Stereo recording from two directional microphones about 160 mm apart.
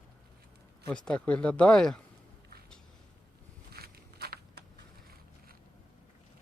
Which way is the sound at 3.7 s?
80° right.